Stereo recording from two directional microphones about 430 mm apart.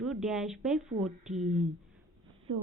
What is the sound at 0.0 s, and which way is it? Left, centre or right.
Speech, centre.